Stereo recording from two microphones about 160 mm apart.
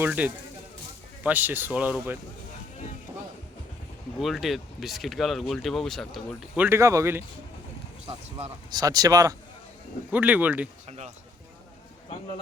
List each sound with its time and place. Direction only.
0.0 s speech: 10° right (ahead or behind)
4.2 s speech: centre (ahead or behind)
6.6 s speech: 15° right (ahead or behind)
8.7 s speech: 25° right (ahead or behind)
10.1 s speech: 10° right (ahead or behind)
10.8 s speech: 45° right (ahead or behind)